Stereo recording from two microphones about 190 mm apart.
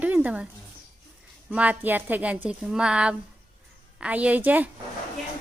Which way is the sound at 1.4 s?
5° right (ahead or behind).